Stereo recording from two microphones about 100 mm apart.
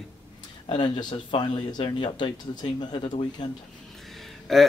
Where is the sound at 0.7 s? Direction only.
50° left (ahead or behind).